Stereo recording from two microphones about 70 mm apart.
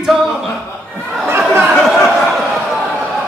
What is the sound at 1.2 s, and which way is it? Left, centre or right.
Chatter, right.